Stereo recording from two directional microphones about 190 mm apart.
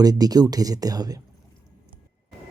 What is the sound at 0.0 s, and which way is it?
Speech, 20° right (ahead or behind).